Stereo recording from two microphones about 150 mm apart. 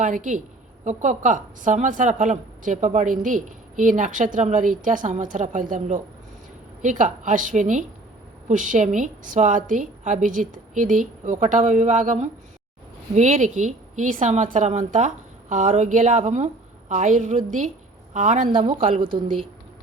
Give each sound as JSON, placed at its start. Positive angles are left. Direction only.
{"t": 0.0, "sound": "a woman's voice", "side_deg": -60}
{"t": 7.0, "sound": "a woman's voice", "side_deg": -60}